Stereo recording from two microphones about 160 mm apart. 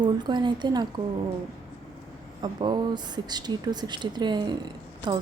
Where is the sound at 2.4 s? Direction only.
25° right (ahead or behind).